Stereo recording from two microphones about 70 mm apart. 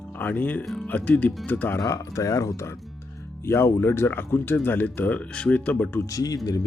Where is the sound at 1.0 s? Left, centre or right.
Centre.